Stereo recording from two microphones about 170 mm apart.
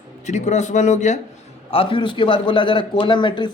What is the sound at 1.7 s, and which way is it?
A man's voice, 30° left (ahead or behind).